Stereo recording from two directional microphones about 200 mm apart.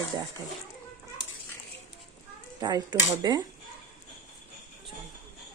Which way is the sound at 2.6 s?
20° right (ahead or behind).